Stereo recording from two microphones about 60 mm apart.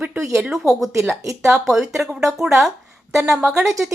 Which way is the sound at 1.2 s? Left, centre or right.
Right.